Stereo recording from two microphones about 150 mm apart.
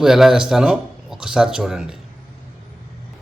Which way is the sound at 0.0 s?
5° right (ahead or behind).